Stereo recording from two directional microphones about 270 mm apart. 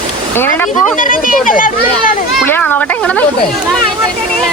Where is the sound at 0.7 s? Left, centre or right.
Left.